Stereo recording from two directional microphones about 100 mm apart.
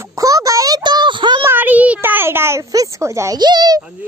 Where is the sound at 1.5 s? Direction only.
20° right (ahead or behind).